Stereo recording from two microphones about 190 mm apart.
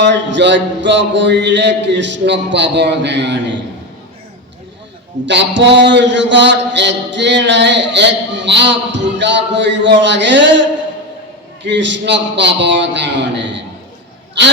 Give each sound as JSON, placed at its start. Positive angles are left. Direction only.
{"t": 0.0, "sound": "a man's voice", "side_deg": -70}
{"t": 5.2, "sound": "a man's voice", "side_deg": -70}